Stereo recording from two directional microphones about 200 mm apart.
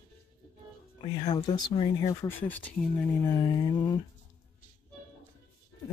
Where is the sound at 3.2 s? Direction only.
20° left (ahead or behind).